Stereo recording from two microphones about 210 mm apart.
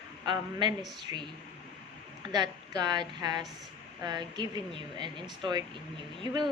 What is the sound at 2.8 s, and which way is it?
Speech, 20° right (ahead or behind).